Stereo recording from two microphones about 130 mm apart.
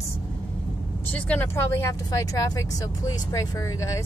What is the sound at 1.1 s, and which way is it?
Speech, 10° left (ahead or behind).